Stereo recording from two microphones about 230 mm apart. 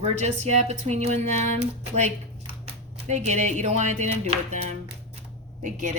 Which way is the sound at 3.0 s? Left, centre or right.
Right.